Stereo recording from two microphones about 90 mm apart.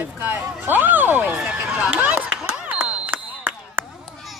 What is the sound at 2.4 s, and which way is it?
Music, 15° right (ahead or behind).